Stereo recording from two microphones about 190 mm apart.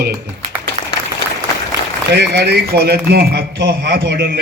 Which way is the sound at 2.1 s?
60° right (ahead or behind).